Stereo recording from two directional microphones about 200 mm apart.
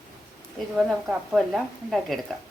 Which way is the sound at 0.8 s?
Centre (ahead or behind).